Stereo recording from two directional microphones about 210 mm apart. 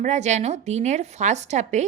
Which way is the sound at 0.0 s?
35° right (ahead or behind).